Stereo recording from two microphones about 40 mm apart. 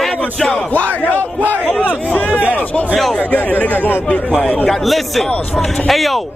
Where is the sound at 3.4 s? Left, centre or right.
Left.